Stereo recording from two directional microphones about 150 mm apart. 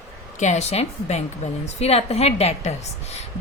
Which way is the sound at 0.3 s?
50° left (ahead or behind).